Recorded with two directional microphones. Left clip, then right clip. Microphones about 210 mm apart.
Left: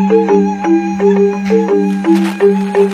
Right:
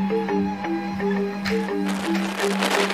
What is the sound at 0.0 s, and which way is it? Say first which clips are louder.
Music: left 14 dB; 50° left (ahead or behind).